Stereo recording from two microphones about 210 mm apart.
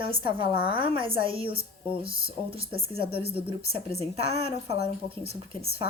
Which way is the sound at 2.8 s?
25° right (ahead or behind).